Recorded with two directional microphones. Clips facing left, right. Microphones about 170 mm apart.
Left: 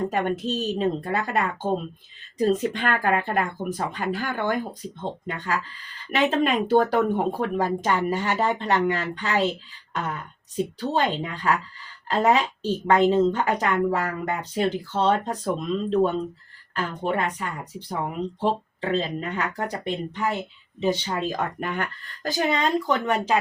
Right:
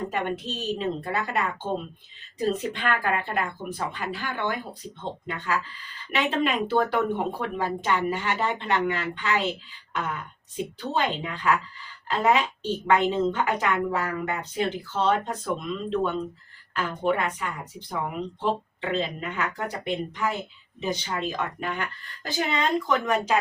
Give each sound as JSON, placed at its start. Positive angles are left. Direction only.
{"t": 0.1, "sound": "a woman's voice", "side_deg": 40}
{"t": 9.9, "sound": "a sound", "side_deg": 40}
{"t": 10.8, "sound": "a woman's voice", "side_deg": 35}